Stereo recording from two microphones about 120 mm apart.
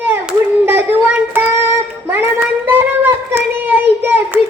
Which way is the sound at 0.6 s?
15° right (ahead or behind).